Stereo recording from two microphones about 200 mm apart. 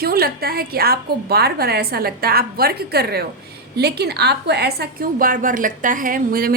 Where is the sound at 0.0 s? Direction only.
50° right (ahead or behind).